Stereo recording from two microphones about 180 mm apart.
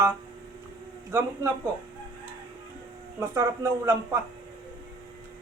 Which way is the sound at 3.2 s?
15° right (ahead or behind).